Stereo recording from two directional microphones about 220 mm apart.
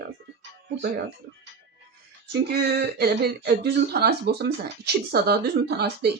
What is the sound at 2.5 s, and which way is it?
Speech, 45° right (ahead or behind).